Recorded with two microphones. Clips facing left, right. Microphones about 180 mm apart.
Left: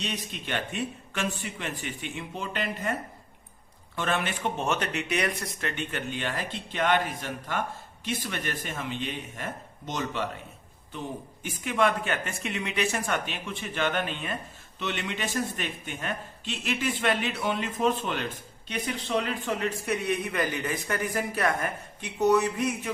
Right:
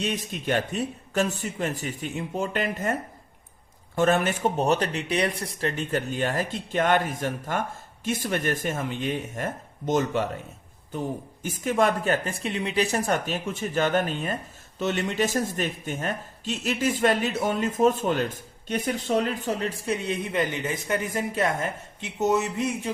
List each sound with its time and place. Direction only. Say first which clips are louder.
0.0 s speech: right 6 dB; 45° right (ahead or behind)
3.9 s speech: right 7 dB; 45° right (ahead or behind)
11.4 s a man's voice: right 3 dB; 45° right (ahead or behind); by 22.9 s 25° right (ahead or behind)